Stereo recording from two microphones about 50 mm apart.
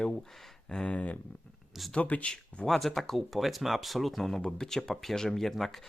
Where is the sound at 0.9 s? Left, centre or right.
Left.